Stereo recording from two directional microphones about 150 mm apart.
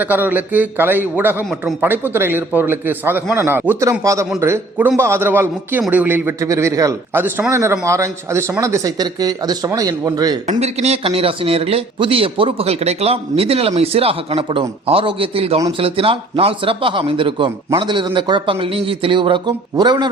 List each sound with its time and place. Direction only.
0.0 s a man's voice: 10° right (ahead or behind)
10.6 s a man's voice: 45° right (ahead or behind); by 20.1 s 30° right (ahead or behind)